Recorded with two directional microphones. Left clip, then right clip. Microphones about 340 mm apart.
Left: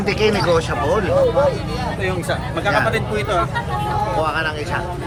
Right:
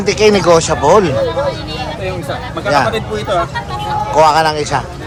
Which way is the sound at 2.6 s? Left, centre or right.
Centre.